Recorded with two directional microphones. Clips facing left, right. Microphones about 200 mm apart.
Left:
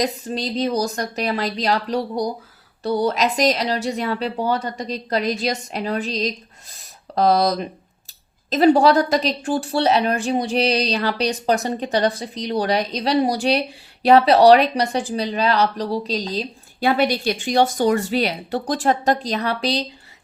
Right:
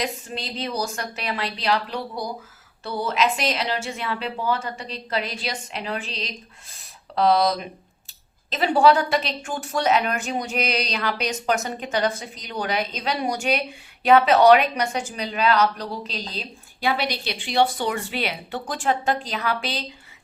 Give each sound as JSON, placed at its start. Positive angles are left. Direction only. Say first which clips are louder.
{"t": 0.0, "sound": "speech", "louder": "left 6 dB", "side_deg": 35}